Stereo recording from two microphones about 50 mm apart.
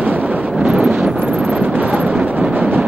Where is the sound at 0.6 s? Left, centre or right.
Right.